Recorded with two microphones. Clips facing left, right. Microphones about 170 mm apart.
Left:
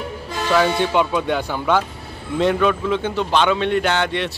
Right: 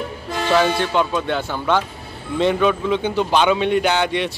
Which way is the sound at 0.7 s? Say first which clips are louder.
Left 1 dB; 10° left (ahead or behind).